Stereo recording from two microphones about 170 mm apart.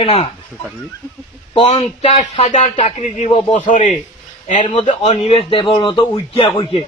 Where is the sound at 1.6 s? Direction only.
40° left (ahead or behind).